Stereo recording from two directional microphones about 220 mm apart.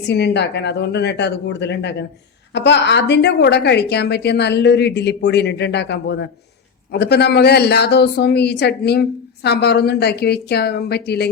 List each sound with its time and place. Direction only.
0.0 s a woman's voice: 50° left (ahead or behind)